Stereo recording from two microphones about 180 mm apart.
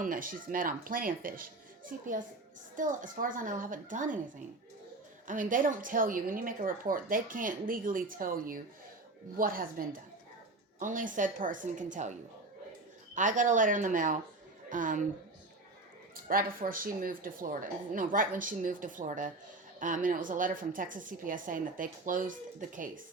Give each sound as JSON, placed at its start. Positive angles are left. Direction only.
{"t": 0.0, "sound": "a woman's voice", "side_deg": -50}
{"t": 5.2, "sound": "a woman's voice", "side_deg": -45}
{"t": 13.1, "sound": "a woman's voice", "side_deg": -45}
{"t": 16.3, "sound": "a woman's voice", "side_deg": -55}